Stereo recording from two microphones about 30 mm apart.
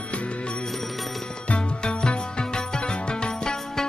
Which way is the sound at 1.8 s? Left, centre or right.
Left.